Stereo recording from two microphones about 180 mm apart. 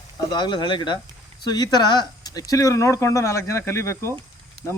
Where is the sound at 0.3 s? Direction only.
25° left (ahead or behind).